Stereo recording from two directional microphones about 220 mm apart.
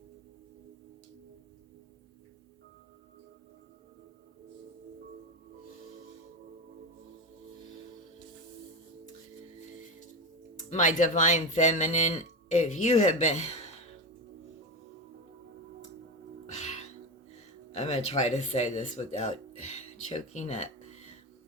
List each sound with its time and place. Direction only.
10.7 s speech: 35° left (ahead or behind)
17.7 s speech: 30° left (ahead or behind)